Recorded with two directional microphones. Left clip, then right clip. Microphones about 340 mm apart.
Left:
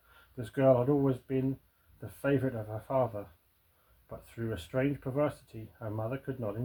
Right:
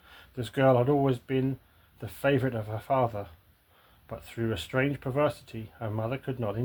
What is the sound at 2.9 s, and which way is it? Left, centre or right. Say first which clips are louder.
Speech: right 4 dB; right.